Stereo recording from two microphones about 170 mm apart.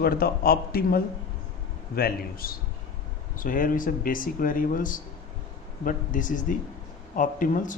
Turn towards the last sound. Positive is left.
turn(degrees=50)  # may be behind; listen again after turning